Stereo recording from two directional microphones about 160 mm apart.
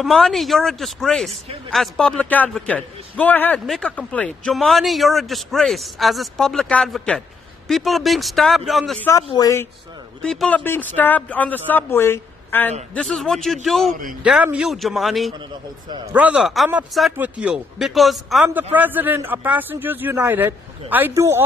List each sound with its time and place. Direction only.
0.0 s a man's voice: centre (ahead or behind)
9.3 s speech: 20° left (ahead or behind)
10.2 s a man's voice: 5° left (ahead or behind)
12.9 s a man's voice: centre (ahead or behind)
18.5 s a man's voice: 10° right (ahead or behind)